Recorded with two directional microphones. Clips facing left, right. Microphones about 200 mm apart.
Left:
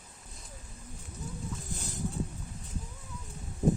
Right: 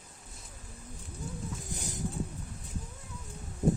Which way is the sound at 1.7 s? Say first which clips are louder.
Even; 15° right (ahead or behind).